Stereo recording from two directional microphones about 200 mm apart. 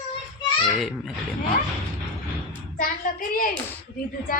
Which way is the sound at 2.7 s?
45° left (ahead or behind).